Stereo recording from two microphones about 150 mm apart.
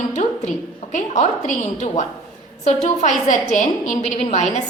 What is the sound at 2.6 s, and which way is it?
A woman's voice, 50° left (ahead or behind).